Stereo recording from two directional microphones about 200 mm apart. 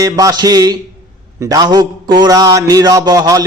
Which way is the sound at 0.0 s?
20° right (ahead or behind).